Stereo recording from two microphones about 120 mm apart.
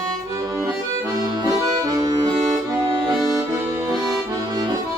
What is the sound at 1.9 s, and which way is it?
Accordion, 30° right (ahead or behind).